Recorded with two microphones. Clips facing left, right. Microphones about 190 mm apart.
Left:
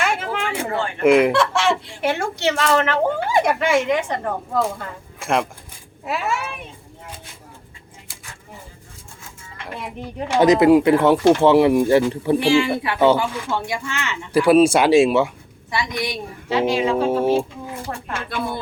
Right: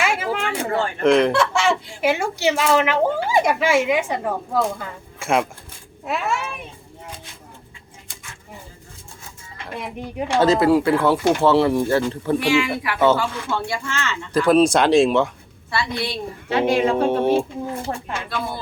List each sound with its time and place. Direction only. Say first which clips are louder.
0.0 s a sound: right 1 dB; 5° right (ahead or behind)
1.0 s speech: left 2 dB; 5° left (ahead or behind)
10.2 s speech: left 3 dB; 10° left (ahead or behind)
12.4 s speech: left 3 dB; 30° left (ahead or behind)
13.0 s speech: left 1 dB; 15° left (ahead or behind)
16.5 s speech: right 1 dB; 55° right (ahead or behind)
17.1 s speech: even; 5° left (ahead or behind)